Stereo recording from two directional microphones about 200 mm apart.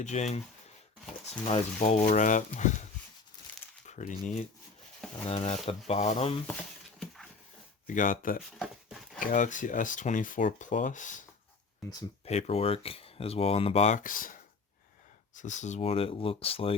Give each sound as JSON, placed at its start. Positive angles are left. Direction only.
{"t": 0.0, "sound": "speech", "side_deg": 35}
{"t": 1.5, "sound": "speech", "side_deg": 35}
{"t": 3.5, "sound": "crumpling", "side_deg": 10}
{"t": 3.8, "sound": "speech", "side_deg": 40}
{"t": 7.9, "sound": "speech", "side_deg": 40}
{"t": 8.5, "sound": "speech", "side_deg": 0}
{"t": 9.1, "sound": "speech", "side_deg": 40}
{"t": 12.2, "sound": "speech", "side_deg": 30}